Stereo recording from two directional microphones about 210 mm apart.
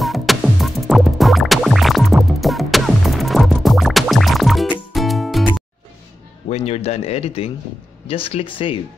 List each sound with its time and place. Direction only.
0.0 s music: centre (ahead or behind)
6.5 s speech: 30° left (ahead or behind)